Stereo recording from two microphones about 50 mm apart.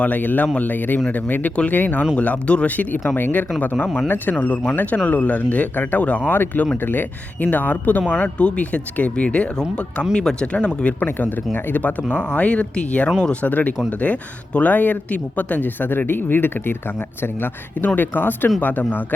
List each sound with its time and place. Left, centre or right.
0.0 s speech: left
6.3 s speech: left
11.0 s speech: left
12.0 s speech: centre; by 17.8 s left
17.8 s speech: left